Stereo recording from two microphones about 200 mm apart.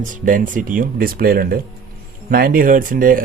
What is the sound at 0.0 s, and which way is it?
Speech, 40° right (ahead or behind).